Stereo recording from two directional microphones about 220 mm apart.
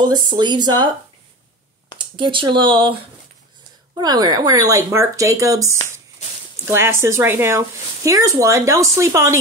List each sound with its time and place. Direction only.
0.0 s speech: 20° right (ahead or behind)
2.0 s speech: 20° right (ahead or behind)